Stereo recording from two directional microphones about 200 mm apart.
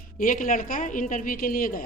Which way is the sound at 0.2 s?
40° left (ahead or behind).